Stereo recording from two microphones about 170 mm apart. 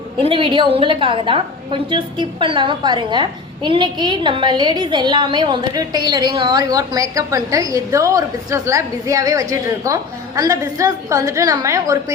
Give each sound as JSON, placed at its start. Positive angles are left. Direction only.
{"t": 0.2, "sound": "a woman's voice", "side_deg": -30}